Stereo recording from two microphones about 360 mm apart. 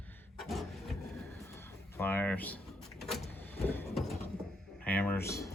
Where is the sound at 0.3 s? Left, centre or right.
Centre.